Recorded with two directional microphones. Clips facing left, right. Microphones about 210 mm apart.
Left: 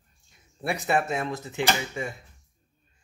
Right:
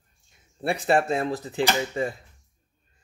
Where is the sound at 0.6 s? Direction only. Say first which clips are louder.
Right 3 dB; 30° right (ahead or behind).